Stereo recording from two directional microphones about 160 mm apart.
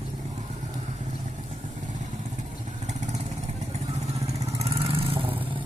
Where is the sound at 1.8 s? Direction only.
50° right (ahead or behind); by 5.6 s 35° right (ahead or behind).